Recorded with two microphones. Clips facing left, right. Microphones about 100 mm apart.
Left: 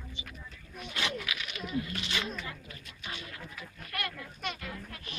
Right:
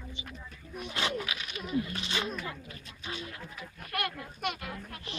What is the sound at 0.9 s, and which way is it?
Speech, 30° right (ahead or behind).